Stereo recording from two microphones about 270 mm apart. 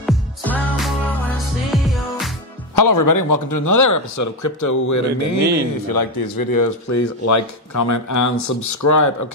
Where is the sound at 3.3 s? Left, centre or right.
Left.